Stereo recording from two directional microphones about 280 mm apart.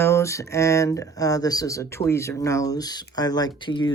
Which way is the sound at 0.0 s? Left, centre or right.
Centre.